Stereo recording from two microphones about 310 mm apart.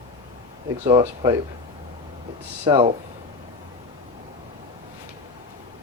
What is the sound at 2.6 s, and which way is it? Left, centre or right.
Speech, centre.